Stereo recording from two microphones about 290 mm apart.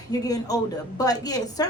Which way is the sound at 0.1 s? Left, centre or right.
Centre.